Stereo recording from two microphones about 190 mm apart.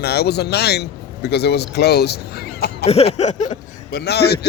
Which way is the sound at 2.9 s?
35° left (ahead or behind).